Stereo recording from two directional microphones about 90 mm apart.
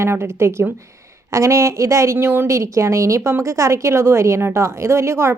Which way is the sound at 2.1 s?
25° right (ahead or behind).